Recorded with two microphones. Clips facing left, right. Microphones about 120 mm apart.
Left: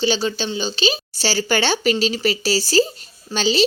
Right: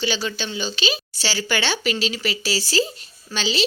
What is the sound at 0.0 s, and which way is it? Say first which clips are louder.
Speech: left 5 dB; 30° left (ahead or behind).